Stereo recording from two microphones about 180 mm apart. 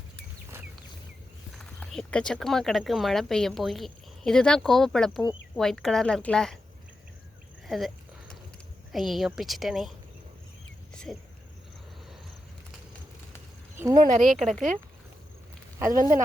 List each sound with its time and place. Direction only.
1.5 s speech: 5° left (ahead or behind)
7.7 s a sound: centre (ahead or behind)
8.9 s speech: centre (ahead or behind)
10.9 s speech: 5° left (ahead or behind)
13.7 s speech: 20° right (ahead or behind)
14.2 s speech: centre (ahead or behind)
15.9 s speech: 50° right (ahead or behind)